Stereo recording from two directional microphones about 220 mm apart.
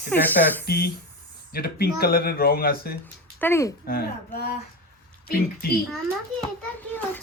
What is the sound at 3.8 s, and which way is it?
Speech, 45° left (ahead or behind).